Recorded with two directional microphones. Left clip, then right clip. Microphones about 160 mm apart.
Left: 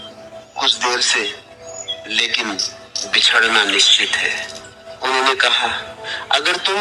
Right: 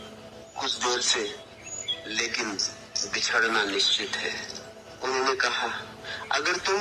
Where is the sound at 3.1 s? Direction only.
45° left (ahead or behind).